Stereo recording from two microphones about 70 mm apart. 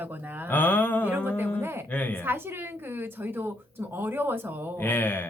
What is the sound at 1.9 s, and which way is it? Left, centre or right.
Speech, left.